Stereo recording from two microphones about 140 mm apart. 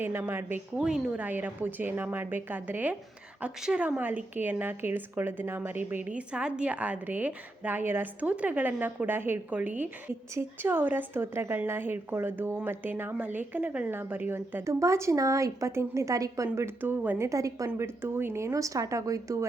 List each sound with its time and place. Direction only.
0.0 s a woman's voice: 15° right (ahead or behind)